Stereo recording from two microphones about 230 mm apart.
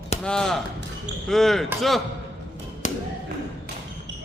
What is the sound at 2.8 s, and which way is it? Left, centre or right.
Thump, left.